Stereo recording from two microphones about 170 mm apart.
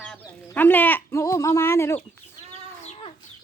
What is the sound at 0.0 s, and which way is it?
Speech, 10° left (ahead or behind).